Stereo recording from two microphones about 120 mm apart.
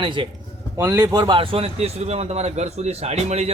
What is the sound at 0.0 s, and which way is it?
Speech, 40° right (ahead or behind).